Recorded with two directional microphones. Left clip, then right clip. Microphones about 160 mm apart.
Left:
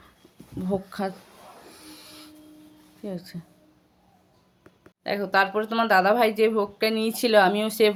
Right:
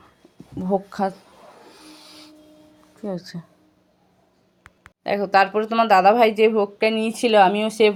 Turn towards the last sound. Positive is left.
turn(degrees=-15)  # may be behind; listen again after turning